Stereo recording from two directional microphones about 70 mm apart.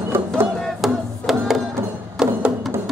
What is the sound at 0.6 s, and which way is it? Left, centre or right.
Music, centre.